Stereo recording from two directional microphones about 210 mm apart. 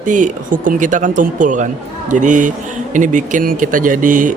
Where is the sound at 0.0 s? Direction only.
35° right (ahead or behind).